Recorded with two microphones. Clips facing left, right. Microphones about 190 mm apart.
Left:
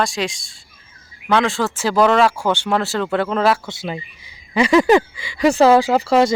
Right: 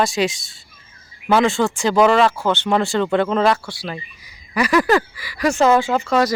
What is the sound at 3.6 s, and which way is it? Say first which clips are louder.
Speech: left 2 dB; 20° left (ahead or behind).